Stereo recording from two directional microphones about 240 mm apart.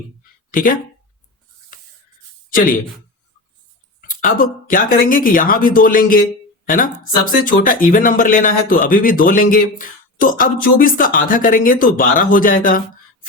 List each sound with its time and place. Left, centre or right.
1.7 s spray: left
4.0 s speech: left